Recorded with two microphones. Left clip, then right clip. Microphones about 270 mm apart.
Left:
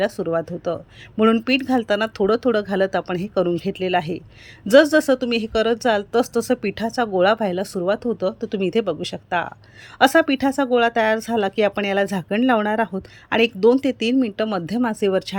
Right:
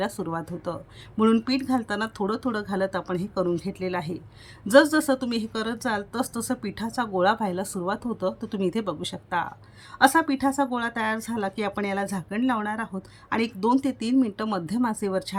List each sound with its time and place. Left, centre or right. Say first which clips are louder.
0.0 s a woman's voice: left 8 dB; centre